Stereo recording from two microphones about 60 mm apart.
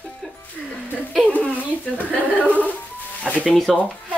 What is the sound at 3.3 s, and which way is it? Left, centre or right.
Speech, centre.